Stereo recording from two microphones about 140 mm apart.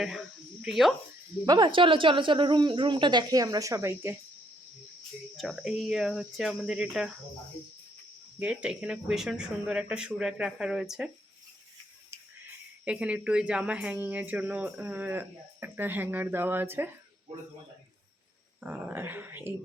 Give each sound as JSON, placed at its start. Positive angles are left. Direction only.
{"t": 0.0, "sound": "speech", "side_deg": -5}
{"t": 1.5, "sound": "speech", "side_deg": -30}
{"t": 5.4, "sound": "speech", "side_deg": 0}
{"t": 8.4, "sound": "speech", "side_deg": -10}
{"t": 12.8, "sound": "speech", "side_deg": -10}
{"t": 18.6, "sound": "speech", "side_deg": -15}